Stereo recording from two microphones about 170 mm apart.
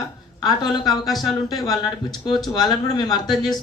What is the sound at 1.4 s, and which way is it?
A woman's voice, 25° left (ahead or behind).